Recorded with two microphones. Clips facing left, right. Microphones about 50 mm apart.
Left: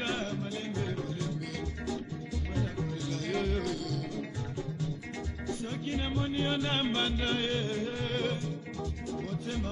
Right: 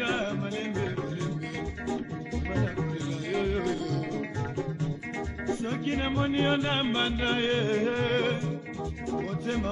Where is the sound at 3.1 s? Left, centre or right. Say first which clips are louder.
Right 2 dB; centre.